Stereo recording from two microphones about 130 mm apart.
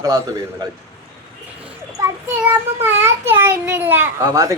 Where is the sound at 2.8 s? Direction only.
15° right (ahead or behind).